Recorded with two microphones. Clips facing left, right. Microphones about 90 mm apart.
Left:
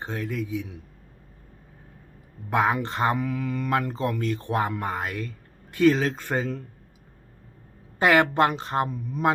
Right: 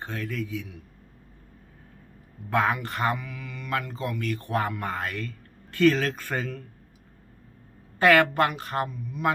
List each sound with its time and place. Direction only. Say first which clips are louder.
0.0 s speech: left 2 dB; 20° left (ahead or behind)
2.5 s speech: left 2 dB; 20° left (ahead or behind)
3.2 s speech: left 11 dB; 40° left (ahead or behind); by 6.6 s 20° left (ahead or behind)
7.9 s speech: even; 20° left (ahead or behind)
8.9 s speech: left 3 dB; 35° left (ahead or behind)